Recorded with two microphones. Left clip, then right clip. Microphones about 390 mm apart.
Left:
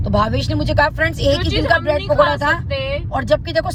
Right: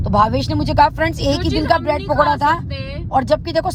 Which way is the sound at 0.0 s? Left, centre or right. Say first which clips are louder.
Right 3 dB; centre.